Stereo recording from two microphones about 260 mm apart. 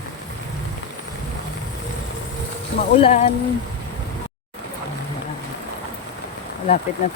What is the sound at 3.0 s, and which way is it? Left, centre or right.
Speech, left.